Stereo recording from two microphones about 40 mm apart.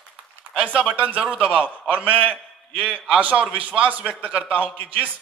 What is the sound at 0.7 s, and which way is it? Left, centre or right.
A man's voice, right.